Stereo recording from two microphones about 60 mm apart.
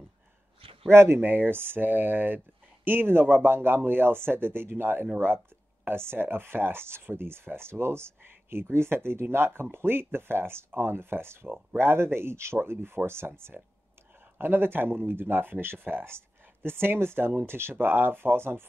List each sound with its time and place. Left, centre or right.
0.8 s speech: right